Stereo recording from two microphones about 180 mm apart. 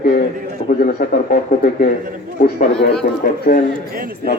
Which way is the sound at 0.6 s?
55° left (ahead or behind).